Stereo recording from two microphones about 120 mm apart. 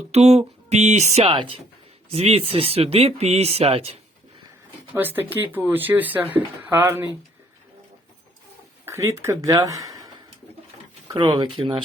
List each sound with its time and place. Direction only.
0.1 s speech: 65° right (ahead or behind)
1.3 s speech: 45° right (ahead or behind)
2.0 s speech: 55° right (ahead or behind)
4.9 s speech: 15° right (ahead or behind)
8.8 s speech: 20° right (ahead or behind)
11.1 s speech: 40° right (ahead or behind)